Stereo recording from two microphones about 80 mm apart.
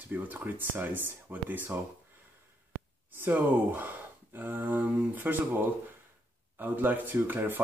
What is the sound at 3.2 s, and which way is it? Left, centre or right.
Speech, right.